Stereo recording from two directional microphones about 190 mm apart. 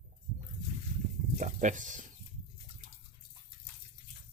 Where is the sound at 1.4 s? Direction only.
40° right (ahead or behind).